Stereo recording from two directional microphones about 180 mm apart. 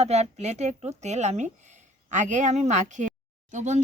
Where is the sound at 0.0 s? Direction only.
40° right (ahead or behind).